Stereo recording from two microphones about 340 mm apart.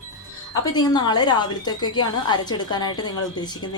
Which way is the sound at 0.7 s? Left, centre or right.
Centre.